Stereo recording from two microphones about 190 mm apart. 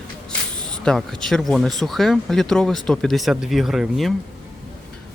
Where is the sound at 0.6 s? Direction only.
5° left (ahead or behind).